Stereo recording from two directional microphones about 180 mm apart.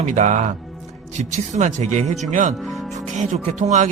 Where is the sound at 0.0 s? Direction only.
45° right (ahead or behind).